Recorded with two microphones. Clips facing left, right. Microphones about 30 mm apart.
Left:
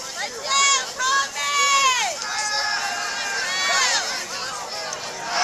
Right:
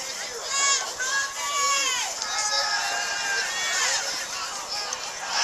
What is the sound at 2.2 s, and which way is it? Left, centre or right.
Run, centre.